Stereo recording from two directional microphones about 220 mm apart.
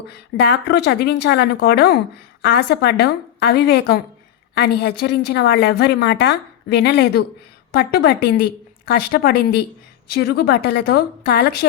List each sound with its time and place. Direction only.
0.1 s a woman's voice: 50° left (ahead or behind)